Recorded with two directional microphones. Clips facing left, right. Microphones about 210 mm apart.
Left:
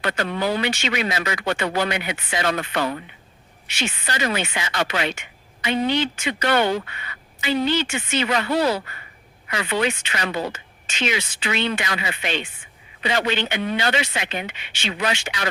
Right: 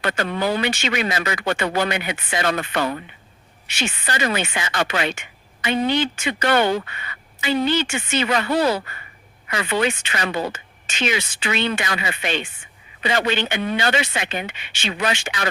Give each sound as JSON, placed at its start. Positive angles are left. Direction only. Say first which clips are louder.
{"t": 0.0, "sound": "speech", "louder": "right 1 dB", "side_deg": -50}